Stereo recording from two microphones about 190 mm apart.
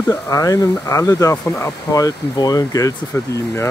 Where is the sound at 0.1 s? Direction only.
15° left (ahead or behind).